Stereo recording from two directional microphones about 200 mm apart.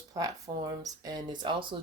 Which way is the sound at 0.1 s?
15° right (ahead or behind).